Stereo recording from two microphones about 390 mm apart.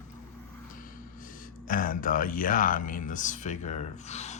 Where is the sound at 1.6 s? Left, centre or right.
Left.